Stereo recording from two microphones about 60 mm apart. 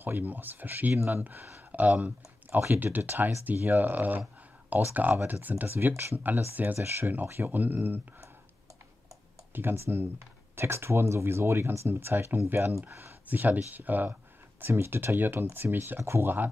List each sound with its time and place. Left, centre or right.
0.0 s speech: right
6.8 s speech: right
9.5 s speech: right
13.3 s speech: right
14.6 s speech: right
16.0 s speech: right